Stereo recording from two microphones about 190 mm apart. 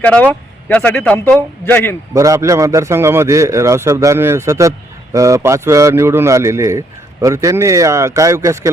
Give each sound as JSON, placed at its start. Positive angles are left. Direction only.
{"t": 0.0, "sound": "a man's voice", "side_deg": 5}
{"t": 2.1, "sound": "a man's voice", "side_deg": -15}